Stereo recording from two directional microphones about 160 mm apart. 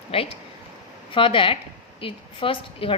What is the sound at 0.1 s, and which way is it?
A woman's voice, 35° left (ahead or behind).